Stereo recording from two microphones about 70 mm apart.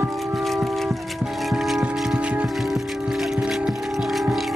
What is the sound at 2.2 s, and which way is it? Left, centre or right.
Music, centre.